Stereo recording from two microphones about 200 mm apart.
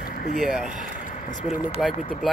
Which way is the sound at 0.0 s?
50° left (ahead or behind).